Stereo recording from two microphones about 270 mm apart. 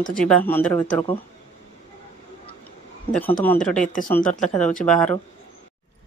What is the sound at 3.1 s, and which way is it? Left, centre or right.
Speech, centre.